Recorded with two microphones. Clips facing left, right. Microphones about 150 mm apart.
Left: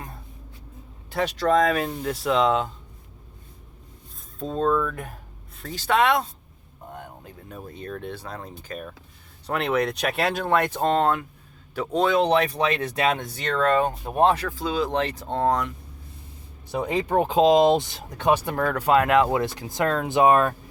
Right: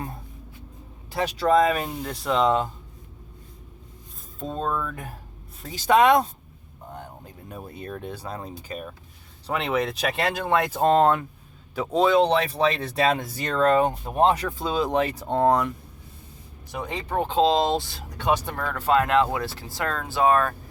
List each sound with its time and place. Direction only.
1.1 s speech: 5° right (ahead or behind)
4.4 s speech: centre (ahead or behind)
4.8 s speech: 15° right (ahead or behind)
7.5 s speech: 10° right (ahead or behind)
10.8 s speech: 20° right (ahead or behind)
11.7 s speech: 10° right (ahead or behind)
14.0 s speech: 10° left (ahead or behind)
14.3 s speech: 15° right (ahead or behind)
16.9 s speech: 10° left (ahead or behind)